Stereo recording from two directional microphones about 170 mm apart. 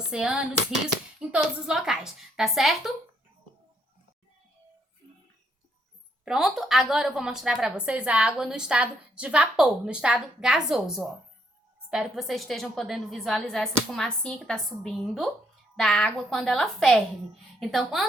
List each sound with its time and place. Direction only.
0.0 s a sound: 5° right (ahead or behind)
1.3 s a woman's voice: 5° right (ahead or behind)
6.2 s a woman's voice: centre (ahead or behind)